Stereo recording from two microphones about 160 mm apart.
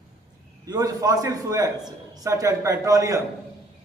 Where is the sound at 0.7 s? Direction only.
25° right (ahead or behind).